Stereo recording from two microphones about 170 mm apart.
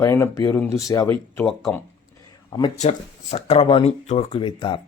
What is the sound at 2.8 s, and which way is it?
Speech, 40° left (ahead or behind).